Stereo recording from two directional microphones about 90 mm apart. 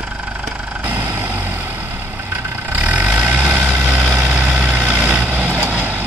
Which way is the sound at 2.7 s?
15° right (ahead or behind).